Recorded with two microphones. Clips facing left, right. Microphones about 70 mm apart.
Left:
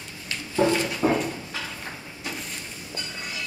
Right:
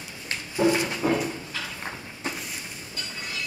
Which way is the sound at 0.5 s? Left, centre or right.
Centre.